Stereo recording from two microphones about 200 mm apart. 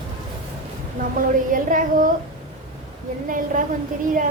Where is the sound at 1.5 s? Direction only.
40° right (ahead or behind).